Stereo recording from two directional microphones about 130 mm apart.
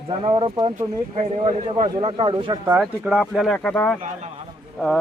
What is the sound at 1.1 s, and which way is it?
Speech, 50° right (ahead or behind).